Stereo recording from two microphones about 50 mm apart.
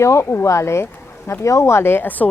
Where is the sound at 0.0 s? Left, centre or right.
Left.